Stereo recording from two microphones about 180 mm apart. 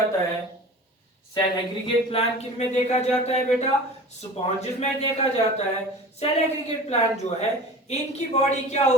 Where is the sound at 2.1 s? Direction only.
35° left (ahead or behind).